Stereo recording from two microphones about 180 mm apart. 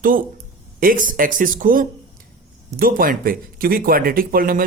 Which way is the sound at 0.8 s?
50° right (ahead or behind).